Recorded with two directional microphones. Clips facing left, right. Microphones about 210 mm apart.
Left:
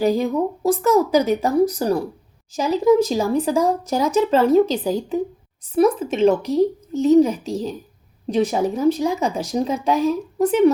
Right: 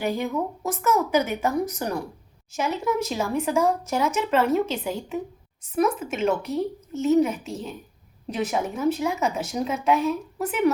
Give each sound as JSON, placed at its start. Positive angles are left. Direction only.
{"t": 0.0, "sound": "speech", "side_deg": 35}